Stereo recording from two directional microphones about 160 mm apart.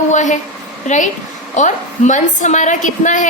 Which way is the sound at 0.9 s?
50° left (ahead or behind).